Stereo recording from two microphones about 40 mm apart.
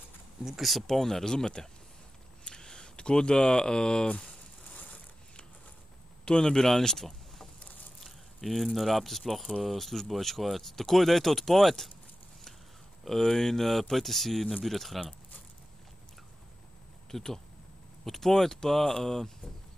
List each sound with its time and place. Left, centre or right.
0.4 s speech: centre
0.7 s speech: centre; by 4.4 s left
4.6 s ratchet: left
6.2 s speech: centre
8.0 s a sound: centre
8.7 s speech: centre
13.0 s speech: centre
17.1 s speech: centre